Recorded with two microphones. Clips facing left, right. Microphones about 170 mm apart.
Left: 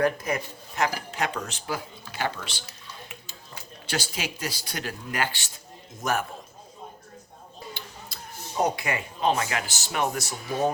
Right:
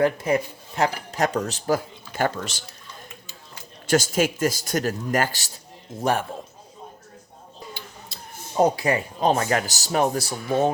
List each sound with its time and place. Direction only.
0.0 s speech: 25° right (ahead or behind); by 2.6 s 45° right (ahead or behind)
3.8 s speech: 45° right (ahead or behind)
5.9 s speech: 30° right (ahead or behind)
8.6 s speech: 35° right (ahead or behind)